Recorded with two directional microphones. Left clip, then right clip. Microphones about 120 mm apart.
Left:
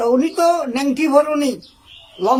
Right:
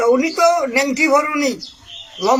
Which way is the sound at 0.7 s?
25° left (ahead or behind).